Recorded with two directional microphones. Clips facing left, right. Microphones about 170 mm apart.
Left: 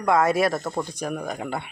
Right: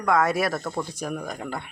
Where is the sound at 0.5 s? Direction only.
15° left (ahead or behind).